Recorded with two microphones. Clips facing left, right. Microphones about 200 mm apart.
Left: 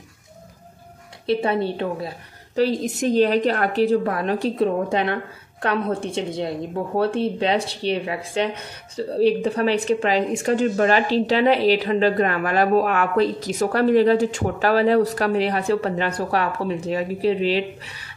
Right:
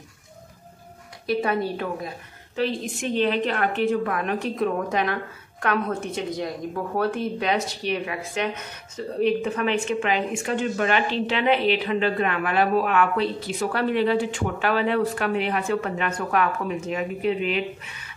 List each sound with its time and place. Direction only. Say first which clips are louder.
1.2 s a woman's voice: left 3 dB; 30° left (ahead or behind)
2.5 s a woman's voice: left 5 dB; 40° left (ahead or behind)